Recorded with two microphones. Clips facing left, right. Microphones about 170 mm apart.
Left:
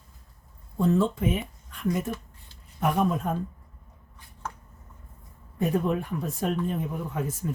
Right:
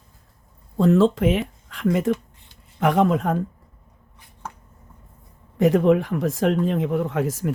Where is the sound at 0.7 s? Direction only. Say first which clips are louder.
Right 7 dB; 85° right.